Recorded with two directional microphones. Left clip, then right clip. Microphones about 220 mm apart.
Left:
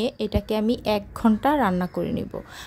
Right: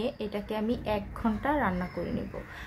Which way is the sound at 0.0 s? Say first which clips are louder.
Left 7 dB; 40° left (ahead or behind).